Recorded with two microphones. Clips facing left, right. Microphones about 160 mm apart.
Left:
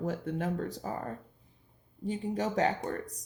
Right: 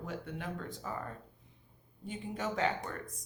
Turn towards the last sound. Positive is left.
turn(degrees=40)  # may be behind; listen again after turning